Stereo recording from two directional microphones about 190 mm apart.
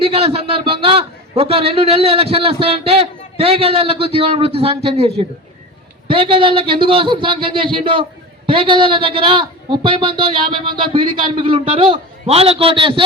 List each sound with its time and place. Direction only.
0.0 s a man's voice: 30° right (ahead or behind)